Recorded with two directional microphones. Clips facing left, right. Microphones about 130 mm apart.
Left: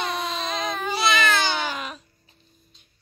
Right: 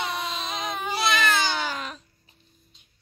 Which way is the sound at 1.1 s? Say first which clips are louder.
Left 1 dB; 5° right (ahead or behind).